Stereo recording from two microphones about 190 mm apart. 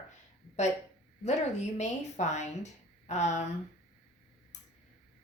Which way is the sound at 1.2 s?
35° left (ahead or behind).